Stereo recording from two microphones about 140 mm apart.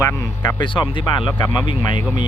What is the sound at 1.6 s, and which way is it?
Speech, 35° left (ahead or behind).